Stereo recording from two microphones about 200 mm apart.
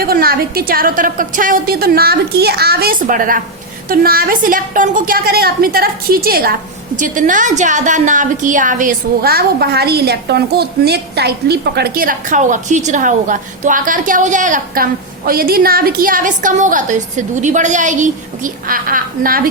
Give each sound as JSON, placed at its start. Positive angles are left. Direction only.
{"t": 0.0, "sound": "a woman's voice", "side_deg": -50}